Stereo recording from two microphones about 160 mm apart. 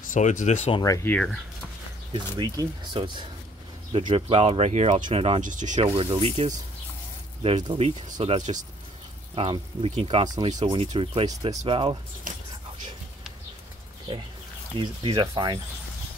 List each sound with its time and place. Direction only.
0.1 s speech: 50° left (ahead or behind)
0.7 s speech: 20° left (ahead or behind)
1.1 s speech: 5° left (ahead or behind)
2.1 s speech: 25° right (ahead or behind)
5.4 s speech: 50° right (ahead or behind)
5.9 s speech: 35° right (ahead or behind)
7.6 s speech: 35° right (ahead or behind)
9.3 s speech: 35° right (ahead or behind)
12.3 s speech: 55° right (ahead or behind)
14.8 s speech: 30° right (ahead or behind)